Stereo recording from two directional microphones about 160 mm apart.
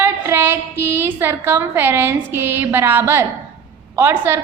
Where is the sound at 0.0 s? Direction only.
15° right (ahead or behind).